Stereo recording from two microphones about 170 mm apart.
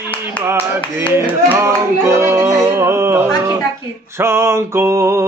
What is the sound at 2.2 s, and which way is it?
Music, 15° right (ahead or behind).